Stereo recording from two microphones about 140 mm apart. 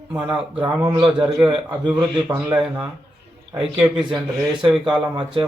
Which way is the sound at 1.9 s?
15° right (ahead or behind).